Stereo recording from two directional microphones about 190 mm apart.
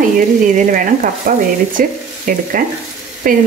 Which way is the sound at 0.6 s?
45° right (ahead or behind).